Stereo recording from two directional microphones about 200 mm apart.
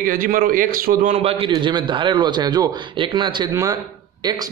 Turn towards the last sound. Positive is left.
turn(degrees=-20)  # may be behind; listen again after turning